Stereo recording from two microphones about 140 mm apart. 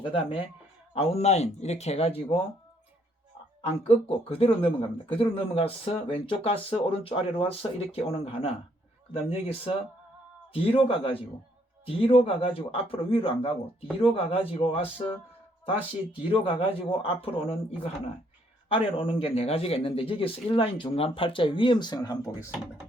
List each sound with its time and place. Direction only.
0.0 s a man's voice: 40° left (ahead or behind)
3.7 s a man's voice: 45° left (ahead or behind)
16.3 s speech: 40° left (ahead or behind)
22.4 s speech: 5° right (ahead or behind)